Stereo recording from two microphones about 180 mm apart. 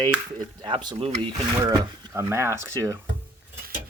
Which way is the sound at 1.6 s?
15° right (ahead or behind).